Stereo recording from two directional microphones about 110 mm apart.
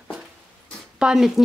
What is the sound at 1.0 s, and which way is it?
Speech, 5° right (ahead or behind).